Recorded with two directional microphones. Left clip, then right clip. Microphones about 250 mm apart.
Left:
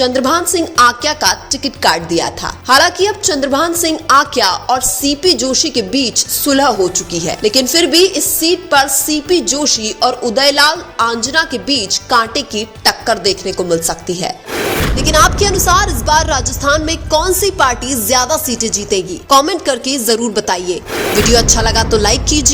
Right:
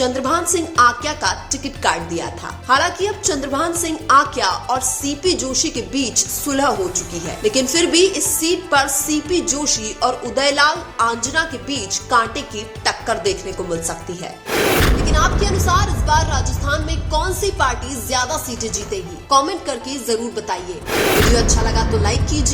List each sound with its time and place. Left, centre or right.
0.0 s a woman's voice: centre
14.5 s music: centre
15.0 s a woman's voice: left
20.9 s speech: centre
21.2 s a woman's voice: left